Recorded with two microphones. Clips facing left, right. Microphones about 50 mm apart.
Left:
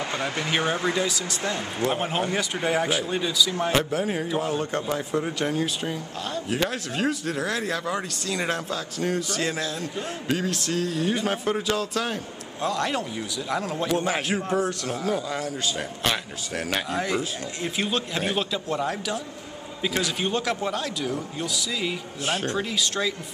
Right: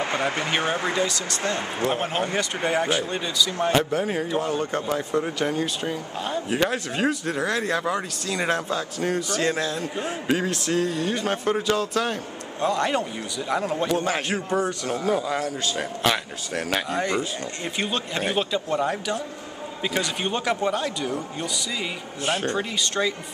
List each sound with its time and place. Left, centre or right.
0.0 s a sound: centre
0.5 s speech: centre
1.0 s speech: centre
6.2 s speech: centre
9.9 s speech: centre
10.5 s speech: centre